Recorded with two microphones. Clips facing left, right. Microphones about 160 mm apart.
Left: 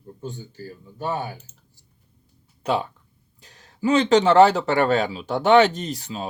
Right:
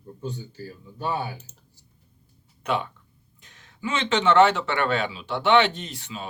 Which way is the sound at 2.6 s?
30° left (ahead or behind).